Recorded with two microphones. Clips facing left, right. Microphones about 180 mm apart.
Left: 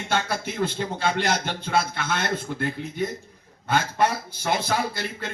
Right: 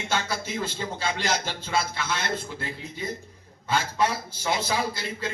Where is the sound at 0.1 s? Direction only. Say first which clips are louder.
Left 3 dB; 55° left (ahead or behind).